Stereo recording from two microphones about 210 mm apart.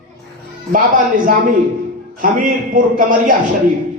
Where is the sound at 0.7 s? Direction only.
40° right (ahead or behind).